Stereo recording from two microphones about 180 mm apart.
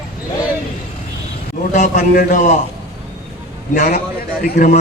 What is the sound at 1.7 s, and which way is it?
Speech, 45° left (ahead or behind).